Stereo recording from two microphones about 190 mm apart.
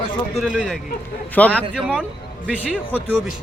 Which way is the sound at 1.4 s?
5° left (ahead or behind).